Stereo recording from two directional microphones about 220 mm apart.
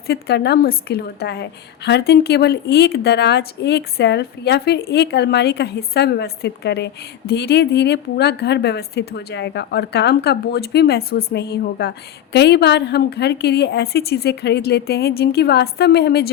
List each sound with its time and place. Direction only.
0.1 s a woman's voice: 45° left (ahead or behind)